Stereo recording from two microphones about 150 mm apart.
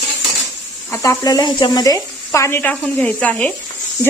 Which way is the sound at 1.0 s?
25° left (ahead or behind).